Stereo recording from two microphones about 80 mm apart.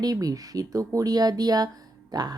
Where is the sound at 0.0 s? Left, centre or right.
Right.